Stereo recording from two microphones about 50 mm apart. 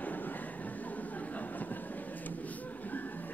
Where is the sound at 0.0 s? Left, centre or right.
Left.